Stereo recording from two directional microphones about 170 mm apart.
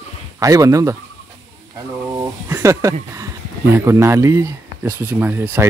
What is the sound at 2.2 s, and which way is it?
Speech, 15° right (ahead or behind).